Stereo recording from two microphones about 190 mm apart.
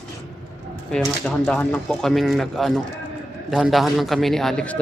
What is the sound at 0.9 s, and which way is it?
Speech, 5° left (ahead or behind).